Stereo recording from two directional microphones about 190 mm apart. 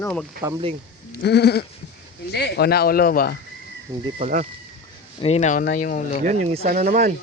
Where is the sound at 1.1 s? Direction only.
60° left (ahead or behind).